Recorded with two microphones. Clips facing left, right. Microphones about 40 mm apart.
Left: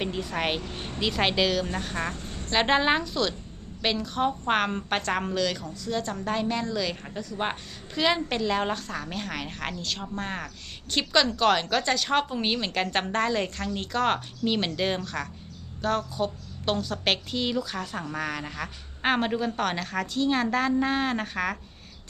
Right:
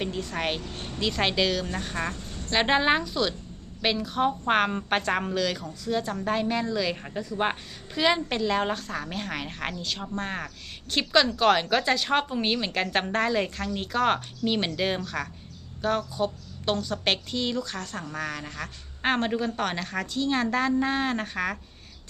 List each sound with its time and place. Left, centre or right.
0.0 s a woman's voice: centre